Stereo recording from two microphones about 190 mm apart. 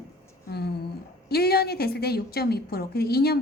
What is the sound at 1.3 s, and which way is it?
A woman's voice, 55° left (ahead or behind).